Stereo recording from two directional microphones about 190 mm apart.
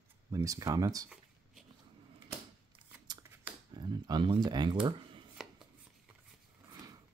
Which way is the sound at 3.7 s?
25° right (ahead or behind).